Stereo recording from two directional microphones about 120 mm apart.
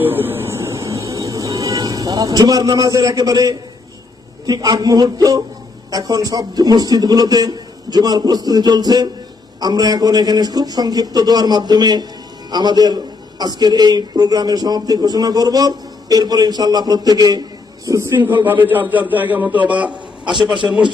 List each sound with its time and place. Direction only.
0.0 s music: 15° right (ahead or behind)
4.4 s a man's voice: 30° right (ahead or behind); by 19.9 s 10° right (ahead or behind)
20.2 s a man's voice: 40° right (ahead or behind)